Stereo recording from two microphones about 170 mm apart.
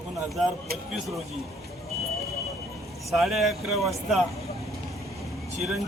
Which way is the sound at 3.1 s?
Centre (ahead or behind).